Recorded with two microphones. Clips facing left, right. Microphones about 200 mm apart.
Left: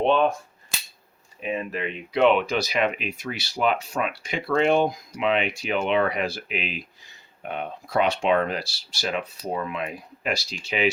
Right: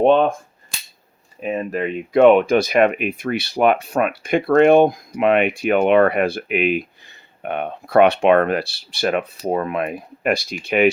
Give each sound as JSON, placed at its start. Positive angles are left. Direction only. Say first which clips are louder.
{"t": 0.0, "sound": "cap gun", "louder": "right 6 dB", "side_deg": -50}
{"t": 1.4, "sound": "speech", "louder": "right 6 dB", "side_deg": -45}